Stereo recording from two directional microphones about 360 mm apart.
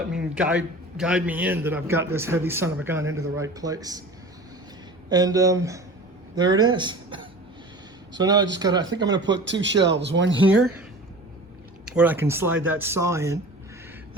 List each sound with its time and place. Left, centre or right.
0.3 s a man's voice: centre
5.0 s a man's voice: centre
9.2 s speech: right
11.9 s a man's voice: centre